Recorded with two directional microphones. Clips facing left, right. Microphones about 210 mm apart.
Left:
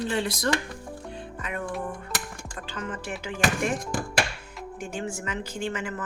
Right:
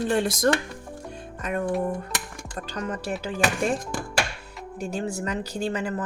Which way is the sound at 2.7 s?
40° right (ahead or behind).